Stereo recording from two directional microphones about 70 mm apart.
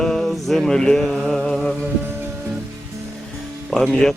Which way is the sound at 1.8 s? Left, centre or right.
Right.